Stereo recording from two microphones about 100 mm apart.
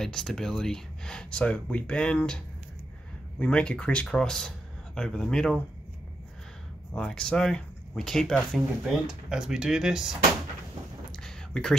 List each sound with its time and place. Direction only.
0.0 s speech: 5° left (ahead or behind)
6.9 s speech: 10° left (ahead or behind)
8.8 s speech: 5° right (ahead or behind)
11.1 s a sound: 5° left (ahead or behind)